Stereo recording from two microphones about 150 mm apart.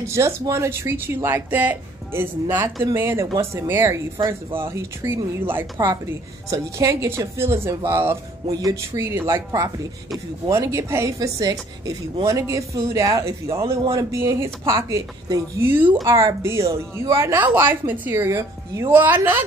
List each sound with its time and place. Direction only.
0.1 s a woman's voice: 20° right (ahead or behind)